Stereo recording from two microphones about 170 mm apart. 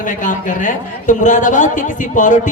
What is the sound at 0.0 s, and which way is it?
A man's voice, 50° left (ahead or behind).